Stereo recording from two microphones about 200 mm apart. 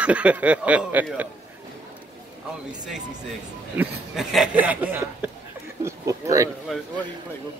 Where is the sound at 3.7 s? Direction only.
Centre (ahead or behind).